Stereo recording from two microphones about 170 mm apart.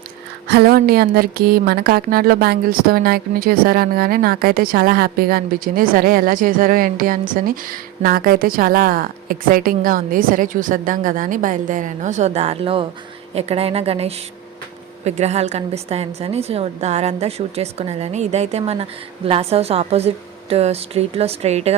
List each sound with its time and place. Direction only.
0.4 s a woman's voice: 75° right (ahead or behind); by 21.8 s 40° right (ahead or behind)